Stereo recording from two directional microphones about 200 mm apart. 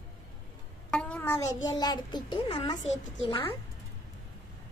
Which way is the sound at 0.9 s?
5° left (ahead or behind).